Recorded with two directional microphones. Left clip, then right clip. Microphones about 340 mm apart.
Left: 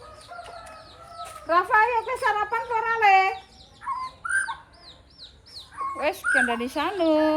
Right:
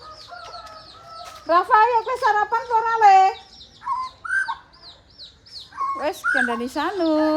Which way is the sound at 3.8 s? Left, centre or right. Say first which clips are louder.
Right 4 dB; centre.